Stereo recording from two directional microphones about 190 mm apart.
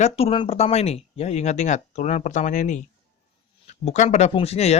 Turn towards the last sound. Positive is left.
turn(degrees=35)  # may be behind; listen again after turning